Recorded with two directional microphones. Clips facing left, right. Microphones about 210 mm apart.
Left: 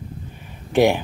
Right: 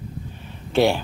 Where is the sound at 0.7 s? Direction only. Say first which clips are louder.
Left 2 dB; 15° left (ahead or behind).